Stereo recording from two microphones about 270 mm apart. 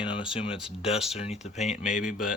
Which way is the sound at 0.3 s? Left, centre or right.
Centre.